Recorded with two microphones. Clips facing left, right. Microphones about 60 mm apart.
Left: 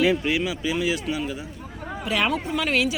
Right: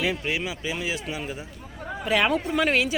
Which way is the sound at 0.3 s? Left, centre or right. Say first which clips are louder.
Left 4 dB; right.